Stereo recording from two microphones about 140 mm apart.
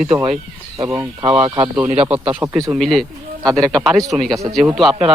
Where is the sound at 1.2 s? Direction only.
40° right (ahead or behind).